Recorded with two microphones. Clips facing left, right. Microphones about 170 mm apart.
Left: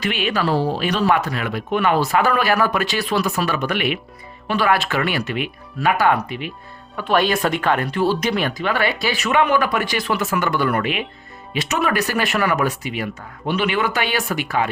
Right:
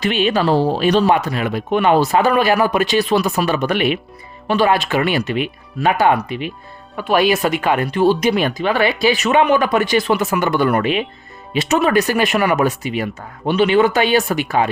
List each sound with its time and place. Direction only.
0.0 s speech: 25° right (ahead or behind)
6.9 s speech: 10° right (ahead or behind); by 14.7 s 25° right (ahead or behind)